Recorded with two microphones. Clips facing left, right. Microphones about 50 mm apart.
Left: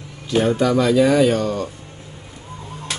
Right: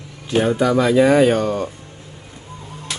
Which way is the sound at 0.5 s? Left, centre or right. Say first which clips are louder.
Right 1 dB; centre.